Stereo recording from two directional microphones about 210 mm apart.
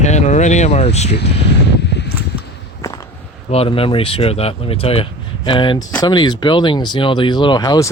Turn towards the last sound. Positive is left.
turn(degrees=20)  # may be behind; listen again after turning